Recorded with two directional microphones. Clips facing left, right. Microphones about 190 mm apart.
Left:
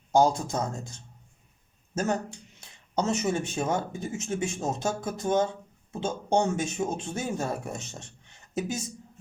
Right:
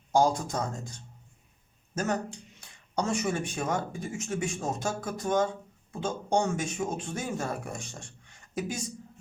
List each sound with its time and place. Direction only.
0.1 s speech: 25° left (ahead or behind)
2.6 s a woman's voice: 25° left (ahead or behind)